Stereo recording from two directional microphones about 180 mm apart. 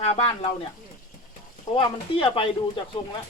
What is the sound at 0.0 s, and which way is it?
Speech, 30° left (ahead or behind).